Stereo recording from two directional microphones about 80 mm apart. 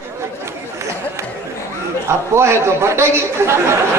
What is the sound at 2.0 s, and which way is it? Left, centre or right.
A man's voice, right.